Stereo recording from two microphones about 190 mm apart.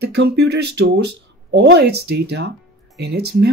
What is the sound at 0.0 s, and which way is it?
Speech, 60° right (ahead or behind).